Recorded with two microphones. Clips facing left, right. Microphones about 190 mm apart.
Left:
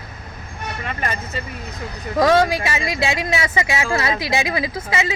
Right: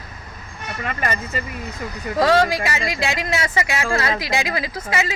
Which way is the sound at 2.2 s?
20° left (ahead or behind).